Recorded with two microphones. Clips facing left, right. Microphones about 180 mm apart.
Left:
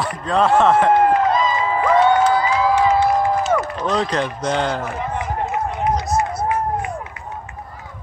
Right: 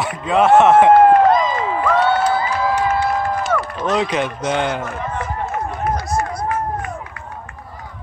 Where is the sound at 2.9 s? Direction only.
15° left (ahead or behind).